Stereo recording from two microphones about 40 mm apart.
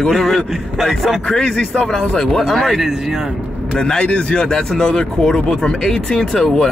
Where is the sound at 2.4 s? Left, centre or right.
Centre.